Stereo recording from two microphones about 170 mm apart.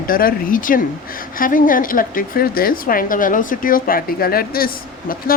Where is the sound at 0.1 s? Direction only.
55° left (ahead or behind).